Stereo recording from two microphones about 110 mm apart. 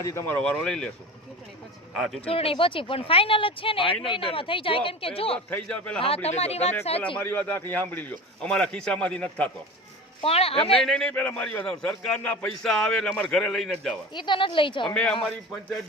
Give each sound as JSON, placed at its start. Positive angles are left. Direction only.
{"t": 0.0, "sound": "speech", "side_deg": 25}
{"t": 0.3, "sound": "speech", "side_deg": 10}
{"t": 1.9, "sound": "speech", "side_deg": 0}
{"t": 2.2, "sound": "speech", "side_deg": 60}
{"t": 5.5, "sound": "a man's voice", "side_deg": 10}
{"t": 6.2, "sound": "speech", "side_deg": 70}
{"t": 7.2, "sound": "a man's voice", "side_deg": 15}
{"t": 10.2, "sound": "speech", "side_deg": 60}
{"t": 10.7, "sound": "a man's voice", "side_deg": 5}
{"t": 14.1, "sound": "speech", "side_deg": 45}
{"t": 14.8, "sound": "a man's voice", "side_deg": 5}